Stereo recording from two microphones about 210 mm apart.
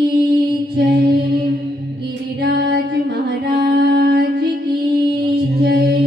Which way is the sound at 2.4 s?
50° right (ahead or behind).